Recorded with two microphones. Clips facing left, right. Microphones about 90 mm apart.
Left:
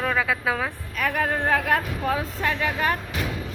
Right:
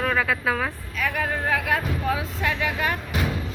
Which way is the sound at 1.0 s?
40° left (ahead or behind).